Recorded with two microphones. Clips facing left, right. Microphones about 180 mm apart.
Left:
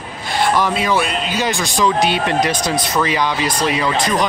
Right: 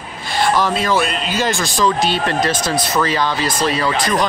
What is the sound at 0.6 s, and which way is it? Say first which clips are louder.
Speech: even; 15° left (ahead or behind).